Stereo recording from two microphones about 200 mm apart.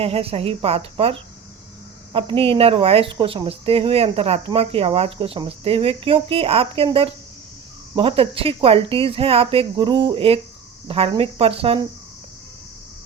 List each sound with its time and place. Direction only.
0.0 s a woman's voice: 30° right (ahead or behind)